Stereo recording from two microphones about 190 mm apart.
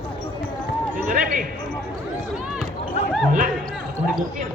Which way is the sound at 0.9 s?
45° right (ahead or behind).